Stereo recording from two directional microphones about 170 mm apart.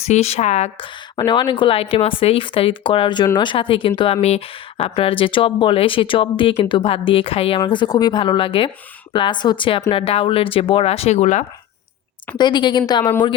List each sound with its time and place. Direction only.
0.0 s speech: 40° left (ahead or behind)
1.1 s a woman's voice: 25° left (ahead or behind); by 11.4 s 40° left (ahead or behind)
12.4 s a woman's voice: 25° left (ahead or behind)